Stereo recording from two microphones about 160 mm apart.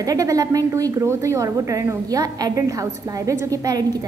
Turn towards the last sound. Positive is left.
turn(degrees=-25)  # may be behind; listen again after turning